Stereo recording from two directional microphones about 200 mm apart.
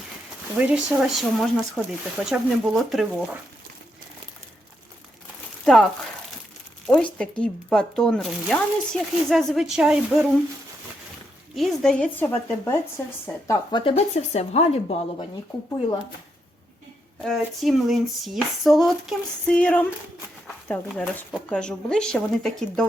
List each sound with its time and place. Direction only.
0.5 s speech: 5° right (ahead or behind)
5.6 s speech: centre (ahead or behind)
11.5 s speech: centre (ahead or behind)
13.7 s speech: 25° left (ahead or behind)
17.2 s speech: centre (ahead or behind)